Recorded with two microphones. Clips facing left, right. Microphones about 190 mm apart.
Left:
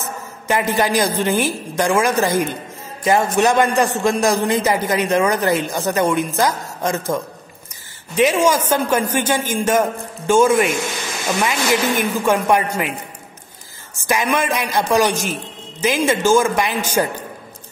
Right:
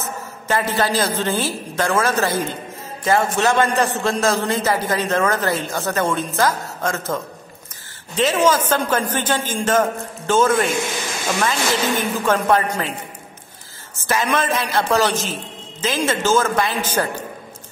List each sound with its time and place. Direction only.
0.5 s a man's voice: 15° left (ahead or behind)
8.2 s a man's voice: 10° left (ahead or behind)
14.0 s a man's voice: 15° left (ahead or behind)